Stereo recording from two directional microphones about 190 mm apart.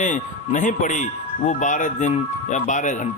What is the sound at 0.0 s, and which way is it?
Speech, 40° left (ahead or behind).